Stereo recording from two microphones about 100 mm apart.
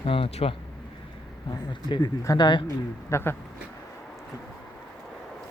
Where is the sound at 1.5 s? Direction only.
50° left (ahead or behind).